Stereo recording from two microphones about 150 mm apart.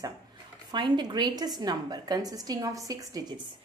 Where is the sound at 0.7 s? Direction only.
30° right (ahead or behind).